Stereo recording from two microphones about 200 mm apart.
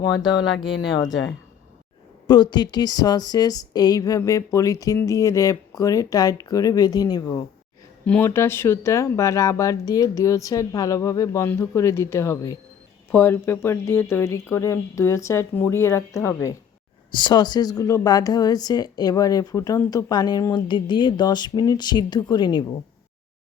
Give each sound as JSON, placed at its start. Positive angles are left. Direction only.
{"t": 0.9, "sound": "speech", "side_deg": 20}
{"t": 2.2, "sound": "speech", "side_deg": 20}
{"t": 8.0, "sound": "speech", "side_deg": 10}